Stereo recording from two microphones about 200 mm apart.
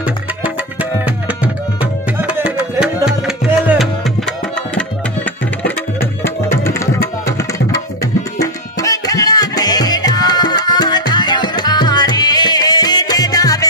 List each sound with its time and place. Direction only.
0.0 s tabla: 5° right (ahead or behind); by 7.6 s 15° left (ahead or behind)
8.4 s music: 15° left (ahead or behind)